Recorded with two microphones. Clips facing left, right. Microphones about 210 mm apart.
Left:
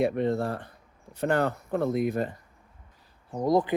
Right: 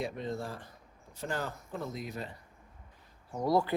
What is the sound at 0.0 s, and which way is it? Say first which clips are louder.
Speech: left 11 dB; 65° left (ahead or behind).